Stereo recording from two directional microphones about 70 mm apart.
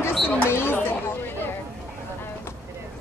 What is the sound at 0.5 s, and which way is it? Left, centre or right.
Chatter, left.